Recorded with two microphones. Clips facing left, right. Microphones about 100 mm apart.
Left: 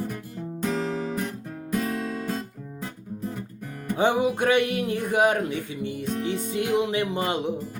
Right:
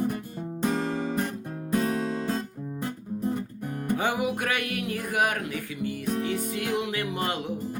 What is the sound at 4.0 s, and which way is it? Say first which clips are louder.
Speech: left 8 dB; 25° left (ahead or behind).